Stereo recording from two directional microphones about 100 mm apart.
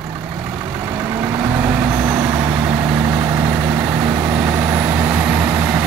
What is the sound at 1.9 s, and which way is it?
Vehicle, 40° right (ahead or behind).